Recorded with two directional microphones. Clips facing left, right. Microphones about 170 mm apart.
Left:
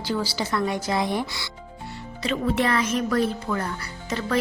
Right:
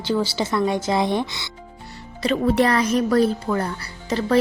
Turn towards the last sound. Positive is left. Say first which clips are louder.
# right 6 dB
turn(degrees=-30)  # may be behind; listen again after turning